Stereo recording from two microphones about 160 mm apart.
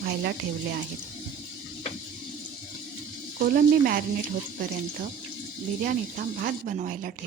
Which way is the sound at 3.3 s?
65° right (ahead or behind).